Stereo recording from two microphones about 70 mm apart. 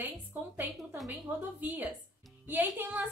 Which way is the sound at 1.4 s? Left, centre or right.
Right.